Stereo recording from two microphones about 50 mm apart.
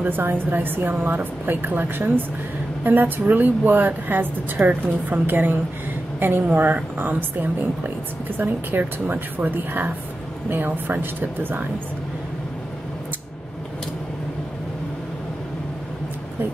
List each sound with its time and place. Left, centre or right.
0.2 s a woman's voice: right